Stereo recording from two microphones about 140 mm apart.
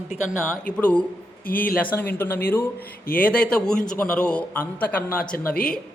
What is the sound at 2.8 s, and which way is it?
Speech, 90° left.